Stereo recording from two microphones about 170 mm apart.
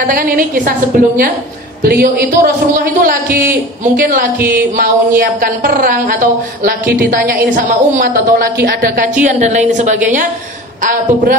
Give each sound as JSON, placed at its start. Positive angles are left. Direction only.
{"t": 0.0, "sound": "a woman's voice", "side_deg": -55}
{"t": 9.2, "sound": "a woman's voice", "side_deg": -45}